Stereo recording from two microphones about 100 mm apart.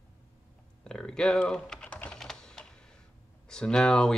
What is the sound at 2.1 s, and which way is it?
Typing, 5° left (ahead or behind).